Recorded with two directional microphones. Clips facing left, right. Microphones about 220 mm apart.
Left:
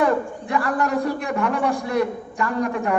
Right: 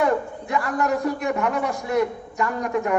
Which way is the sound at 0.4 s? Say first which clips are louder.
Left 1 dB; 30° left (ahead or behind).